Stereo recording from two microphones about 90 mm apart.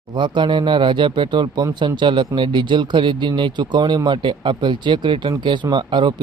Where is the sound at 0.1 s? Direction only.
60° right (ahead or behind).